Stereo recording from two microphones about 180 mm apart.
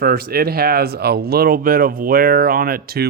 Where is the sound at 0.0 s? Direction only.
55° right (ahead or behind).